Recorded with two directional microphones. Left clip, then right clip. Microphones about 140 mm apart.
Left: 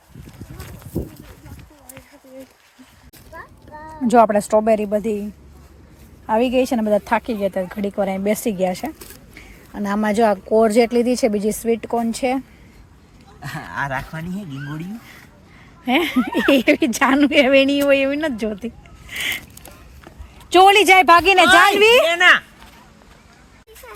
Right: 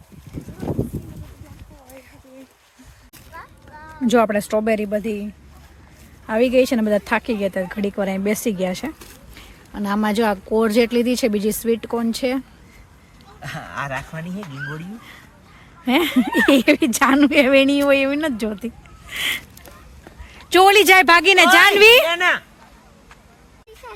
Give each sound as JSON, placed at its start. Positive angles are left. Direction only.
{"t": 4.0, "sound": "speech", "side_deg": -15}
{"t": 6.2, "sound": "speech", "side_deg": -25}
{"t": 9.7, "sound": "speech", "side_deg": -5}
{"t": 13.4, "sound": "a sound", "side_deg": -5}
{"t": 14.1, "sound": "speech", "side_deg": 0}
{"t": 15.8, "sound": "speech", "side_deg": -25}
{"t": 20.5, "sound": "speech", "side_deg": -25}
{"t": 22.0, "sound": "speech", "side_deg": -5}